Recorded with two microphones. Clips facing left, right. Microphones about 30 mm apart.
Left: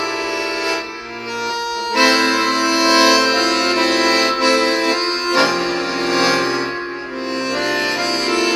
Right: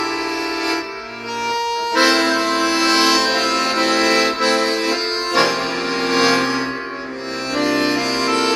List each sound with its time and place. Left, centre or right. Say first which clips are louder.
1.5 s accordion: right 2 dB; centre
2.2 s accordion: left 1 dB; left
2.9 s music: left 5 dB; centre
5.3 s music: left 1 dB; centre
7.5 s accordion: right 3 dB; centre